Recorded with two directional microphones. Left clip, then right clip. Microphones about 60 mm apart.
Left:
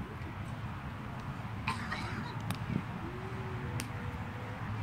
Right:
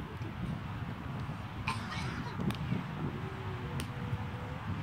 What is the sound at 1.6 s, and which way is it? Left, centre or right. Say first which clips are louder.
Cough: left 1 dB; left.